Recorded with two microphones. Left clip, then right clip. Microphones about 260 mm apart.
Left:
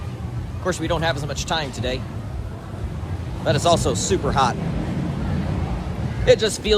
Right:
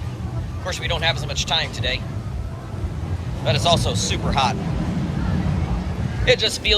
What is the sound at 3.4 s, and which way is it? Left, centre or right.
Speech, left.